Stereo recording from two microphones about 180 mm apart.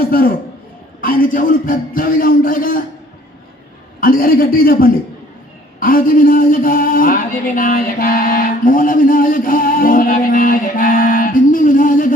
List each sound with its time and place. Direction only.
0.0 s a man's voice: 55° left (ahead or behind)
4.0 s speech: 55° left (ahead or behind)